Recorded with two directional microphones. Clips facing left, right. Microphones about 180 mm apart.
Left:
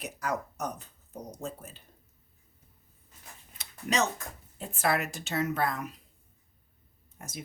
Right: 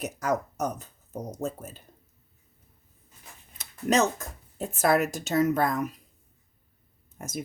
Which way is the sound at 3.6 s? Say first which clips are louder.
Right 6 dB; 45° right (ahead or behind).